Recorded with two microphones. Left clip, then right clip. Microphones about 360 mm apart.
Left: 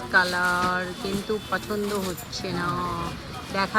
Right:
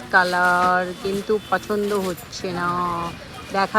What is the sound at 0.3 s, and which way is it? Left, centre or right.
Speech, right.